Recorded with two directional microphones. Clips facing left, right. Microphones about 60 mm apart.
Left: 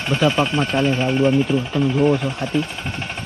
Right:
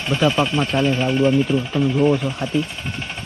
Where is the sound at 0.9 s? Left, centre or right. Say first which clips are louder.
Even; centre.